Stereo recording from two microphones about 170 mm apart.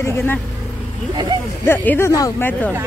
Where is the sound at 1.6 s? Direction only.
10° left (ahead or behind).